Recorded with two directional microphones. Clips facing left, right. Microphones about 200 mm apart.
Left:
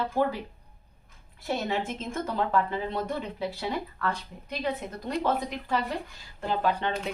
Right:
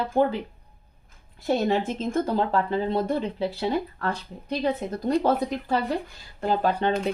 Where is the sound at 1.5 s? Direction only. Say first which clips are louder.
Right 6 dB; 35° right (ahead or behind).